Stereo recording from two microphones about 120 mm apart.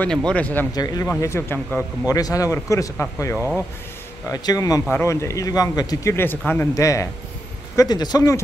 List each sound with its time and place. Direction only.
0.0 s speech: 10° left (ahead or behind)
0.7 s speech: 30° left (ahead or behind)
1.2 s speech: 20° left (ahead or behind)
3.3 s speech: 15° right (ahead or behind)
4.3 s speech: 30° left (ahead or behind)
6.1 s speech: 15° left (ahead or behind)
6.7 s speech: 25° left (ahead or behind)